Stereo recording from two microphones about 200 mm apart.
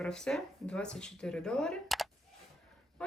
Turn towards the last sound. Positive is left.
turn(degrees=5)  # may be behind; listen again after turning